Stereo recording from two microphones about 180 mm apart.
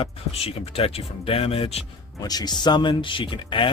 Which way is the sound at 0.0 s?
30° left (ahead or behind).